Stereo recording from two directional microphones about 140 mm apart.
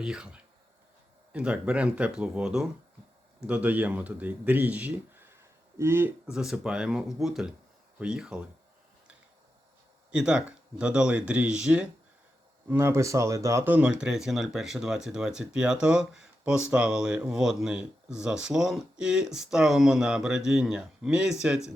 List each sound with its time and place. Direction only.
0.0 s a man's voice: 5° right (ahead or behind)
6.3 s speech: 5° right (ahead or behind)
10.1 s speech: 5° right (ahead or behind)
12.6 s speech: 15° right (ahead or behind)